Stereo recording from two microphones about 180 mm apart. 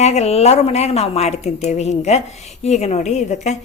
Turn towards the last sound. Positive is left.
turn(degrees=40)  # may be behind; listen again after turning